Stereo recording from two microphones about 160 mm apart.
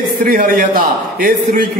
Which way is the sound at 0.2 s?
60° right (ahead or behind).